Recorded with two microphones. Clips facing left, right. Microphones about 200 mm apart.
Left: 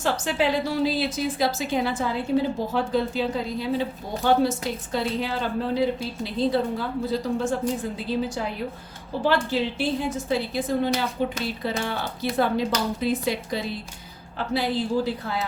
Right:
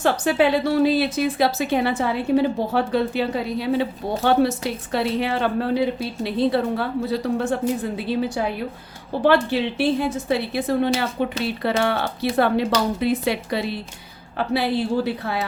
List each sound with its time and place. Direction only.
0.0 s a woman's voice: 60° right (ahead or behind)
9.2 s a woman's voice: 65° right (ahead or behind)